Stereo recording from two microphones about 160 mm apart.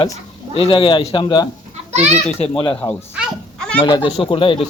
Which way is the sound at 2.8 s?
20° left (ahead or behind).